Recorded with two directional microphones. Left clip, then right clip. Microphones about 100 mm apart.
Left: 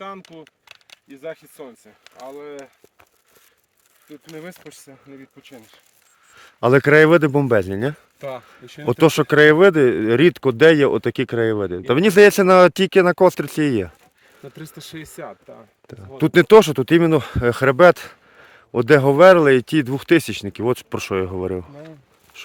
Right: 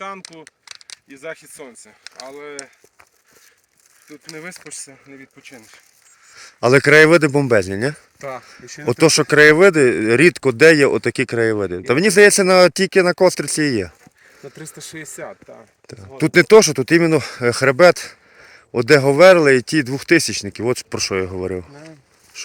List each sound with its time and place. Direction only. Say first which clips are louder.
0.0 s speech: right 3 dB; 5° left (ahead or behind)
4.1 s speech: right 3 dB; 5° left (ahead or behind)
6.3 s speech: right 2 dB; 10° right (ahead or behind)
8.2 s speech: even; 50° left (ahead or behind)
8.9 s speech: right 1 dB; centre (ahead or behind)
11.9 s speech: even; 20° left (ahead or behind); by 13.9 s 5° left (ahead or behind)
15.9 s speech: right 1 dB; 5° right (ahead or behind)
22.3 s dog: right 5 dB; centre (ahead or behind)